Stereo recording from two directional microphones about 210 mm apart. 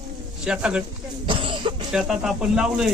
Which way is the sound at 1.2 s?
25° right (ahead or behind).